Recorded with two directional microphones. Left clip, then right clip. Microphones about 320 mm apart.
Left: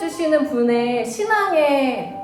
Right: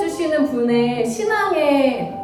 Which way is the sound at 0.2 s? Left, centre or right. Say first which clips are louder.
Left 3 dB; centre.